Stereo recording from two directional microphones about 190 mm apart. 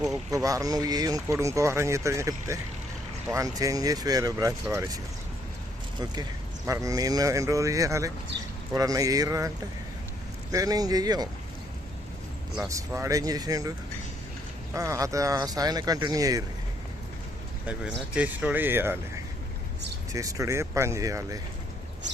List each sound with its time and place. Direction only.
0.3 s speech: 20° right (ahead or behind)
6.7 s speech: 15° right (ahead or behind)
10.5 s speech: 20° right (ahead or behind)
12.6 s speech: 15° right (ahead or behind)
17.7 s speech: 5° right (ahead or behind)